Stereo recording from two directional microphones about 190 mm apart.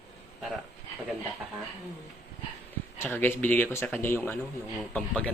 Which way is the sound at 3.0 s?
10° left (ahead or behind).